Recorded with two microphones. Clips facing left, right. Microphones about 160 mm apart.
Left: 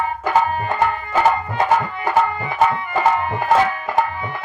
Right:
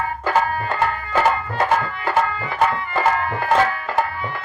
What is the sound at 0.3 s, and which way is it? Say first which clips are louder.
Music: left 2 dB; 20° left (ahead or behind).